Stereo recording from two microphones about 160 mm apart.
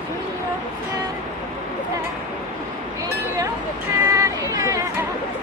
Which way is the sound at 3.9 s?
20° right (ahead or behind).